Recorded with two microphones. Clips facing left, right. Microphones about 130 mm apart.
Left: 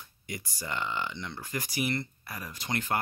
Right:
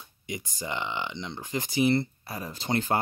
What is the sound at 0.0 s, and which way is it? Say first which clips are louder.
Speech: right 4 dB; 20° right (ahead or behind).